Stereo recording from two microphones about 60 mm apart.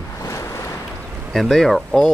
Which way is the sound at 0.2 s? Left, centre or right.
Left.